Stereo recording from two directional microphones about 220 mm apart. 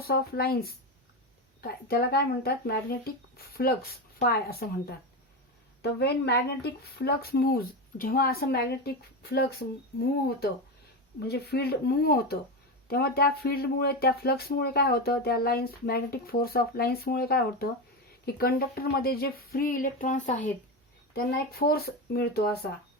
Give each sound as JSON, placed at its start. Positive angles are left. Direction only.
{"t": 0.0, "sound": "speech", "side_deg": 45}
{"t": 11.2, "sound": "speech", "side_deg": 50}